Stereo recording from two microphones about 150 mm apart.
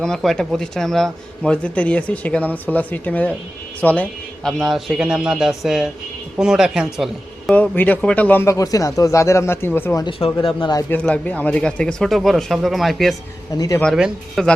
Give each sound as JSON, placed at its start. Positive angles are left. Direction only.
{"t": 0.0, "sound": "speech", "side_deg": 5}
{"t": 7.5, "sound": "speech", "side_deg": 10}
{"t": 10.0, "sound": "speech", "side_deg": 35}
{"t": 10.8, "sound": "speech", "side_deg": 10}
{"t": 13.5, "sound": "speech", "side_deg": 25}
{"t": 13.9, "sound": "speech", "side_deg": 0}